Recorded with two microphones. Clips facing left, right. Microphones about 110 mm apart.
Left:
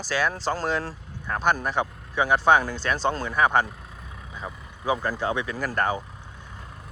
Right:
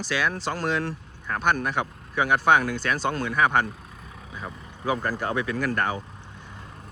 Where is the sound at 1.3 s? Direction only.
25° left (ahead or behind).